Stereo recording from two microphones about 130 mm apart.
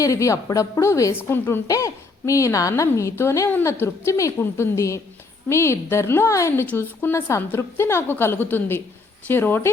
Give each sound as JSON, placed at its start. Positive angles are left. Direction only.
{"t": 0.0, "sound": "a woman's voice", "side_deg": 25}